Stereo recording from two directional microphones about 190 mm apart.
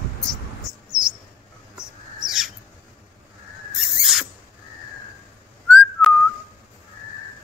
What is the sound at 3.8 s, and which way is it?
Owl, centre (ahead or behind).